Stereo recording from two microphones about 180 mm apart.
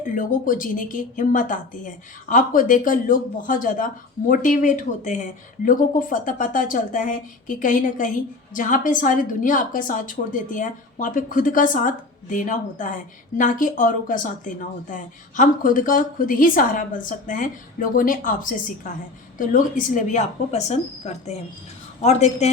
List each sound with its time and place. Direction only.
0.0 s a woman's voice: 45° left (ahead or behind)